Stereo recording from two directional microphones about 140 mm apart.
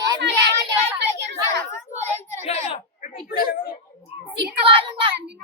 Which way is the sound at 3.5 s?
90° left.